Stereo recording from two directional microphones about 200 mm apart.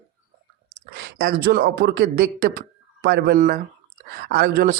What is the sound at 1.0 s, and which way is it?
Speech, 50° right (ahead or behind).